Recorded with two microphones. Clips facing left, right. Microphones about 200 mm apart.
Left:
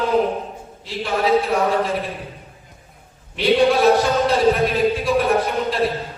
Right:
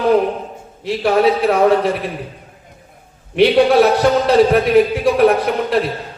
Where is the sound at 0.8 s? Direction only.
65° right (ahead or behind).